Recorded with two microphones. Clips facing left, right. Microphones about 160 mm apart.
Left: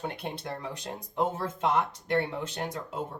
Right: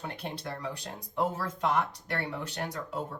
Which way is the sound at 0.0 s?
25° left (ahead or behind).